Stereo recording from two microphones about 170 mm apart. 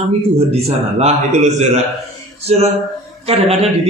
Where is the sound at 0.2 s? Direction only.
35° right (ahead or behind).